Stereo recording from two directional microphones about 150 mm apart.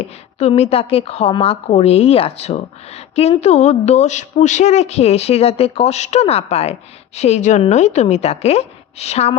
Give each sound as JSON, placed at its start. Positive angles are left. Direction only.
{"t": 0.3, "sound": "a woman's voice", "side_deg": 45}